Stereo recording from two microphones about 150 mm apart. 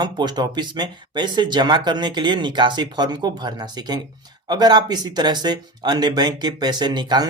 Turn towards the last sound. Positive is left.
turn(degrees=-30)  # may be behind; listen again after turning